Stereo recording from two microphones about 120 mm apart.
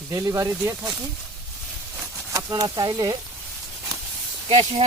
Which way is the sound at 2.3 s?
30° right (ahead or behind).